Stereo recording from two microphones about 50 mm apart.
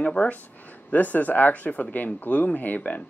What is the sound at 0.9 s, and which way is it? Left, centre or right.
Speech, left.